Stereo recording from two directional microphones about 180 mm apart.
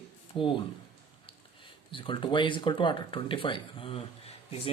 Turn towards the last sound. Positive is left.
turn(degrees=30)  # may be behind; listen again after turning